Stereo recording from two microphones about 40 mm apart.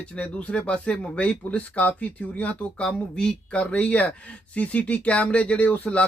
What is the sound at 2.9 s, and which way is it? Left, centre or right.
Speech, left.